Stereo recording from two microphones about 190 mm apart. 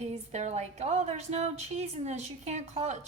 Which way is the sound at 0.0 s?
35° right (ahead or behind).